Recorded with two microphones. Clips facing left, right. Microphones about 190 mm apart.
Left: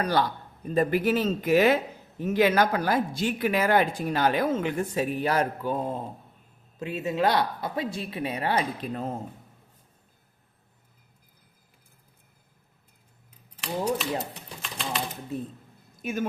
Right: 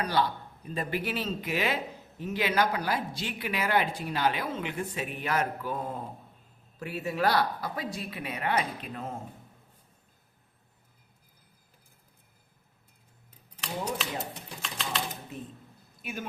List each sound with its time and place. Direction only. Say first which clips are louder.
0.0 s a man's voice: left 3 dB; 45° left (ahead or behind)
14.6 s typewriter: left 3 dB; centre (ahead or behind)
16.0 s speech: left 8 dB; 45° left (ahead or behind)